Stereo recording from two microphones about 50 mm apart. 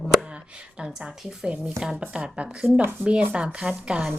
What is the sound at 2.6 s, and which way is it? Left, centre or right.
Speech, right.